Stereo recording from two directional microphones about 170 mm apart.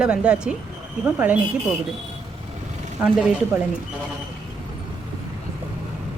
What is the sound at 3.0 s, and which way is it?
Speech, 5° right (ahead or behind).